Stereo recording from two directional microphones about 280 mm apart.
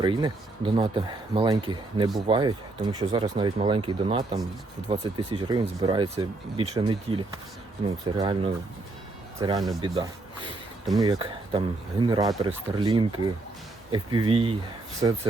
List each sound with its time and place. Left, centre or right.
0.0 s speech: centre
9.4 s speech: centre